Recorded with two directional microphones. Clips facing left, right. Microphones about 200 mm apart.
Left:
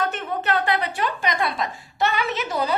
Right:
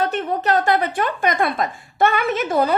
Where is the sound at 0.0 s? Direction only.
35° right (ahead or behind).